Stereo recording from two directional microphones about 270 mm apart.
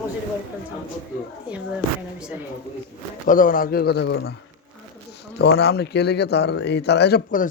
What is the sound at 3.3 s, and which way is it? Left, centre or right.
A man's voice, left.